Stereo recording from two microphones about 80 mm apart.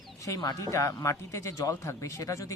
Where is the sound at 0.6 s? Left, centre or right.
Left.